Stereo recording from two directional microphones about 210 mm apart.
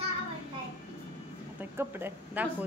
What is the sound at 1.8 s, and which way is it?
Speech, 10° right (ahead or behind).